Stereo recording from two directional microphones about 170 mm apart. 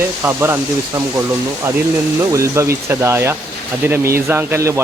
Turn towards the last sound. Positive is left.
turn(degrees=-15)  # may be behind; listen again after turning